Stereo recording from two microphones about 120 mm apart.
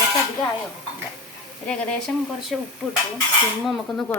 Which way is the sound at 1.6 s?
5° left (ahead or behind).